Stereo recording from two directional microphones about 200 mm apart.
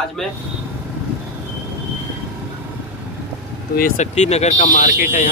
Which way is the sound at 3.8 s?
40° left (ahead or behind).